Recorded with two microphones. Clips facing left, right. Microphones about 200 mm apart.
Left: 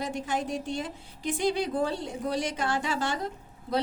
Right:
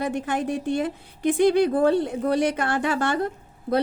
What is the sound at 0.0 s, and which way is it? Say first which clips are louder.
A woman's voice: right 5 dB; 60° right (ahead or behind).